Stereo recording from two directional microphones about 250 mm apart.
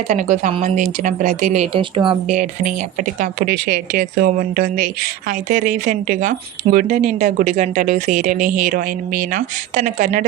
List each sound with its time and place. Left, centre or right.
0.1 s speech: right
2.3 s speech: right